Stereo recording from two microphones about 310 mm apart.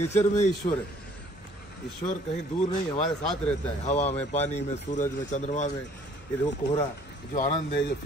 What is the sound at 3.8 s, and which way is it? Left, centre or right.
Speech, left.